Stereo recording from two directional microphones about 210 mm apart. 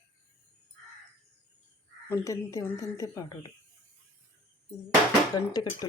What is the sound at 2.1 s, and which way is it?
A woman's voice, 15° left (ahead or behind).